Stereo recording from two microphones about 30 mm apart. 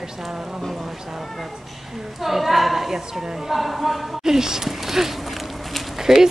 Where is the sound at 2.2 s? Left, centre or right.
Centre.